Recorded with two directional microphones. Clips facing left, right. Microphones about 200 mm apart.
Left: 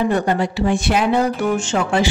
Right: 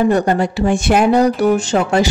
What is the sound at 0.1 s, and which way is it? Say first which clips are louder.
Speech: right 4 dB; 45° right (ahead or behind).